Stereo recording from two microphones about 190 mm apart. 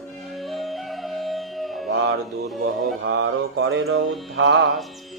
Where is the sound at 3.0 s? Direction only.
70° right (ahead or behind).